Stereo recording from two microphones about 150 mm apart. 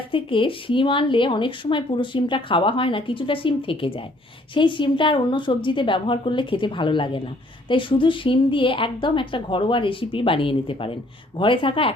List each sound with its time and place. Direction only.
0.1 s speech: 35° left (ahead or behind)